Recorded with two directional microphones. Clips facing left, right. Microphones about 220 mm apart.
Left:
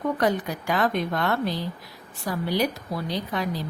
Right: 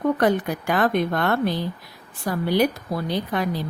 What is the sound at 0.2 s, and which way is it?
Speech, 55° right (ahead or behind).